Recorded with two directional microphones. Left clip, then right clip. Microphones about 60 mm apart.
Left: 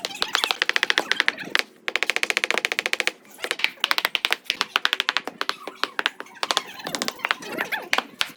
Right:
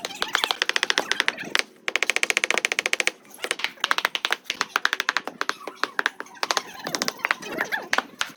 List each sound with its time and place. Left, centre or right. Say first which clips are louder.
0.0 s typewriter: left 1 dB; centre
0.6 s typewriter: left 2 dB; centre
3.4 s typing: left 3 dB; centre
5.4 s a sound: even; centre
6.1 s computer keyboard: even; left